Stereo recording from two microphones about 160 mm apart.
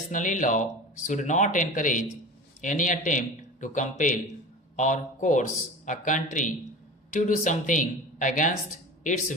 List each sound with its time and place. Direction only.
0.1 s a man's voice: 55° left (ahead or behind)